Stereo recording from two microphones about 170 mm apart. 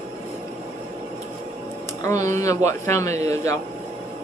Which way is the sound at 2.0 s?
20° left (ahead or behind).